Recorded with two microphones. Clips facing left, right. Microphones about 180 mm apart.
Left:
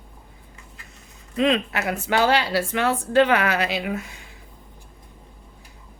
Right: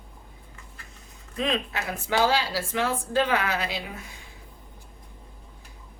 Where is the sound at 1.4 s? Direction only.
70° left (ahead or behind).